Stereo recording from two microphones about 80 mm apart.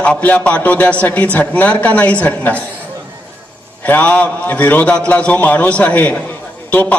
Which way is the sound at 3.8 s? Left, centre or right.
Centre.